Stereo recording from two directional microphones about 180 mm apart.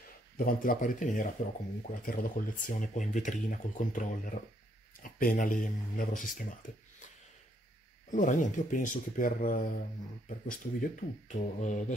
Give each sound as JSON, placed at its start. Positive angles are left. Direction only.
{"t": 0.4, "sound": "speech", "side_deg": 50}
{"t": 8.1, "sound": "speech", "side_deg": 45}